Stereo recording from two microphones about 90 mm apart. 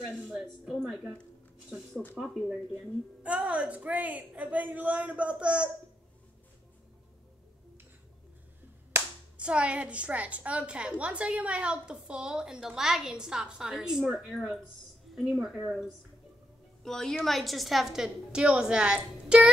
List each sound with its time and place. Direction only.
0.7 s a woman's voice: centre (ahead or behind)
9.4 s a woman's voice: 15° right (ahead or behind)
16.8 s a woman's voice: 5° left (ahead or behind); by 19.5 s 10° right (ahead or behind)